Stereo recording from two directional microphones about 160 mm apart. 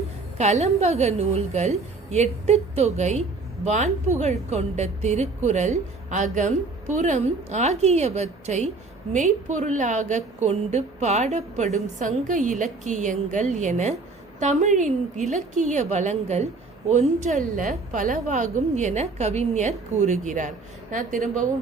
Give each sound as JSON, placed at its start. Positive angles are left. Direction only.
{"t": 0.3, "sound": "a woman's voice", "side_deg": -45}